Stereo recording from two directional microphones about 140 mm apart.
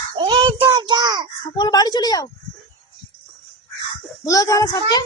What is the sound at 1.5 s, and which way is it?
Speech, 30° left (ahead or behind).